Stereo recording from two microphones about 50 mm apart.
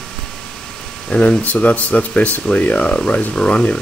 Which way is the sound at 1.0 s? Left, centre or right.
Left.